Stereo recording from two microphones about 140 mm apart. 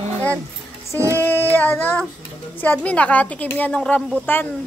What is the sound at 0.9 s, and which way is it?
Music, 20° right (ahead or behind).